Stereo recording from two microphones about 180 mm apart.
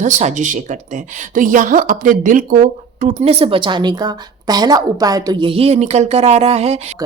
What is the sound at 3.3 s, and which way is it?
A woman's voice, 30° right (ahead or behind).